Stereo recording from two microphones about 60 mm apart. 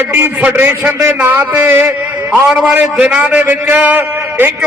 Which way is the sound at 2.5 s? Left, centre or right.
Centre.